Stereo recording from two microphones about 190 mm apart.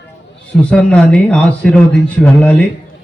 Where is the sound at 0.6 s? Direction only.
5° left (ahead or behind).